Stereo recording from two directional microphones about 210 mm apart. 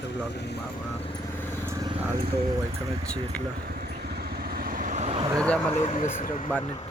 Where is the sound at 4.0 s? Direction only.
45° right (ahead or behind); by 5.2 s 30° right (ahead or behind).